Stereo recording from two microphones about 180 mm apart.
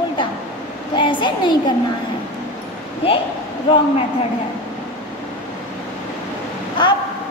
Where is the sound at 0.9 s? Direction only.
25° left (ahead or behind).